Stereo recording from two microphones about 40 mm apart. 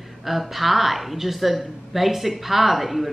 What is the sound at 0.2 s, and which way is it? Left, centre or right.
Speech, centre.